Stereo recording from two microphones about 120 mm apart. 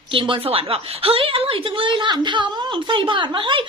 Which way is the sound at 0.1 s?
45° right (ahead or behind).